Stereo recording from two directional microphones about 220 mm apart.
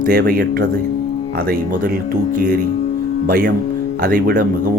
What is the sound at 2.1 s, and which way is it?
Speech, 40° right (ahead or behind).